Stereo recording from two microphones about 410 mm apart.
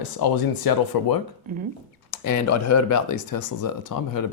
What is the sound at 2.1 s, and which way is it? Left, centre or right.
Speech, left.